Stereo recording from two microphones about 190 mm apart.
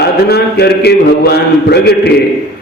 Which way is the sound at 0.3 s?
60° left (ahead or behind).